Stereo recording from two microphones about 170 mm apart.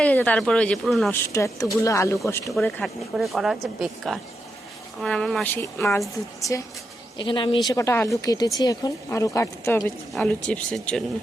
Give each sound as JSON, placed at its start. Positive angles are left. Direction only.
{"t": 0.0, "sound": "speech", "side_deg": 10}
{"t": 1.1, "sound": "speech", "side_deg": 15}
{"t": 2.6, "sound": "speech", "side_deg": 5}
{"t": 7.2, "sound": "speech", "side_deg": 30}
{"t": 7.7, "sound": "speech", "side_deg": 15}